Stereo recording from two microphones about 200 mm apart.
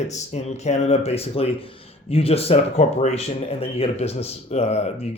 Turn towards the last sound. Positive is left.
turn(degrees=30)  # may be behind; listen again after turning